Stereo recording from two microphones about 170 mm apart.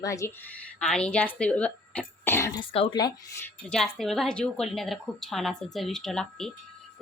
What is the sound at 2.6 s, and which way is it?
Speech, 30° left (ahead or behind).